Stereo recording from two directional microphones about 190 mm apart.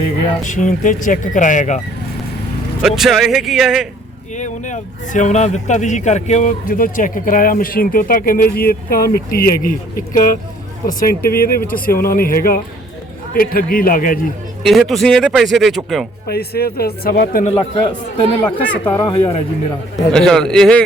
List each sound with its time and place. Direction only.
0.4 s speech: 40° left (ahead or behind)
2.8 s speech: centre (ahead or behind)
4.4 s a man's voice: 40° left (ahead or behind)
14.6 s speech: centre (ahead or behind)
16.3 s a man's voice: 55° left (ahead or behind)
17.4 s a man's voice: 30° left (ahead or behind)
18.6 s speech: 5° left (ahead or behind)
18.9 s a man's voice: 25° left (ahead or behind)
20.1 s speech: 5° left (ahead or behind)